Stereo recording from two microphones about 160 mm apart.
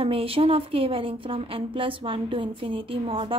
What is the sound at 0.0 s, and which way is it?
A woman's voice, 35° right (ahead or behind).